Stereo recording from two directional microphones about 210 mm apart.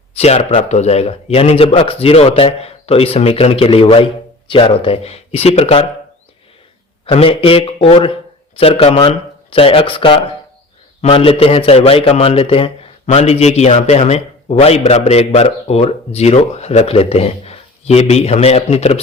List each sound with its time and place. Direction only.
0.2 s a man's voice: 30° left (ahead or behind)
7.0 s a man's voice: 25° left (ahead or behind)